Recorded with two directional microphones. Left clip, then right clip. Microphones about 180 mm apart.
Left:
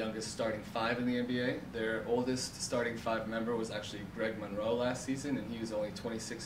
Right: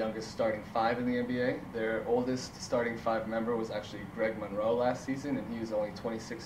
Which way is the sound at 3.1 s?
25° left (ahead or behind).